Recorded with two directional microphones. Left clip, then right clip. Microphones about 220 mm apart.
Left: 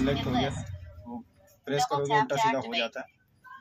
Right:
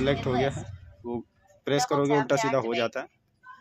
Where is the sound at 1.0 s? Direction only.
45° right (ahead or behind).